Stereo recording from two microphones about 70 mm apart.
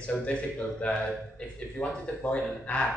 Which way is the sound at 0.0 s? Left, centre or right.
Centre.